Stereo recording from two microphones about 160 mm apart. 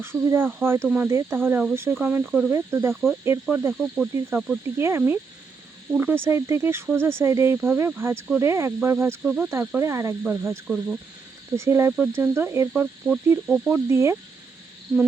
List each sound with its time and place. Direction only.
0.0 s speech: 15° right (ahead or behind)